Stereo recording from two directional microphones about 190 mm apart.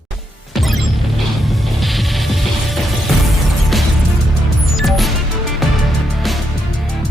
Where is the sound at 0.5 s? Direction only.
Centre (ahead or behind).